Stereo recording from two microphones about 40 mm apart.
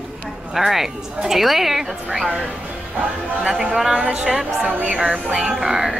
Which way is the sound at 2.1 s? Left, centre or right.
Centre.